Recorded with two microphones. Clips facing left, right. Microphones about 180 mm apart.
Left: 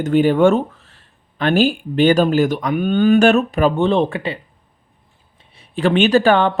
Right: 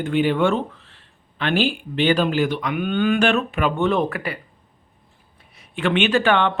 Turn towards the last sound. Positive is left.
turn(degrees=40)  # may be behind; listen again after turning